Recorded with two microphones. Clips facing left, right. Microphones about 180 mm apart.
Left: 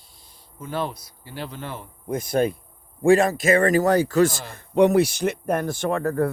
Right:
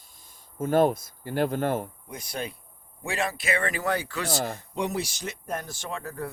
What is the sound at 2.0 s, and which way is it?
Speech, 50° left (ahead or behind).